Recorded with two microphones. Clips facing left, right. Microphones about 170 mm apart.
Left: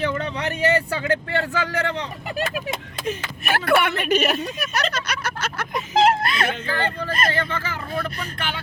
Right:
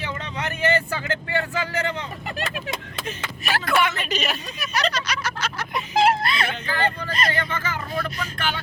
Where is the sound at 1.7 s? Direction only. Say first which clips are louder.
Left 2 dB; 65° left (ahead or behind).